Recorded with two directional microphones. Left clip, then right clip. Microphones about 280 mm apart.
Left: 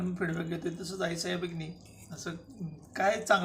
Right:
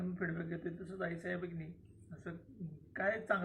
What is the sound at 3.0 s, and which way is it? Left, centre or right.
Speech, centre.